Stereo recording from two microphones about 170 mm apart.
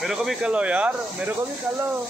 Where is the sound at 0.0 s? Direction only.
Centre (ahead or behind).